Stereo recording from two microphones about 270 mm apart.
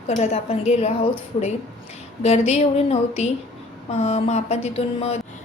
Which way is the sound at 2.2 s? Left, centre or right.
Left.